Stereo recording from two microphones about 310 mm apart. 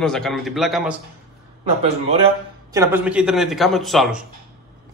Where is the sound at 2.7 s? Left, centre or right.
Centre.